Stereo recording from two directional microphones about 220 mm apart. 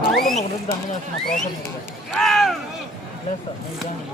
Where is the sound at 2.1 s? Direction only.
Centre (ahead or behind).